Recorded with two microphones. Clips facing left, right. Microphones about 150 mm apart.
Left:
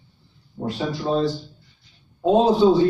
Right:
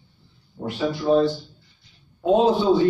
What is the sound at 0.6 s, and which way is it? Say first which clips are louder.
Speech: left 2 dB; 5° left (ahead or behind).